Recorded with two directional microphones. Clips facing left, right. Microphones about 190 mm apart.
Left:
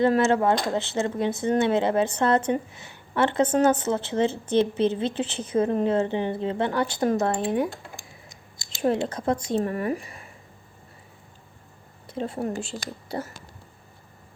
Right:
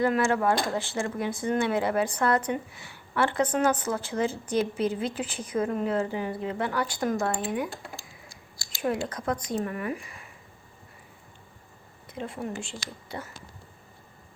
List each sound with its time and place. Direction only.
0.0 s speech: 25° left (ahead or behind)
7.9 s a sound: 20° left (ahead or behind); by 10.2 s 35° left (ahead or behind)
12.0 s speech: 30° left (ahead or behind)